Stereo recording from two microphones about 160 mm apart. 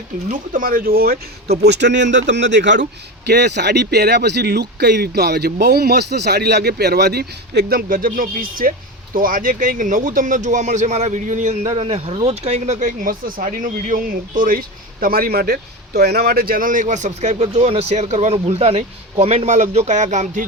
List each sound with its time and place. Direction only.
0.3 s speech: 60° right (ahead or behind)